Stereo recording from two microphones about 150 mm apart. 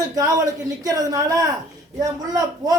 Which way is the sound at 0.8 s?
25° right (ahead or behind).